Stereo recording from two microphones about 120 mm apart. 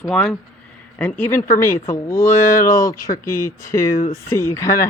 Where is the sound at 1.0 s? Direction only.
15° left (ahead or behind).